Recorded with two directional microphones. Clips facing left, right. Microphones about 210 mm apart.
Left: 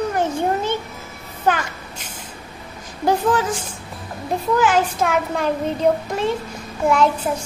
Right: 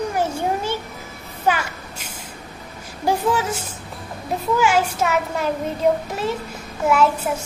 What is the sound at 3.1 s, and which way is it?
A child's voice, 10° right (ahead or behind).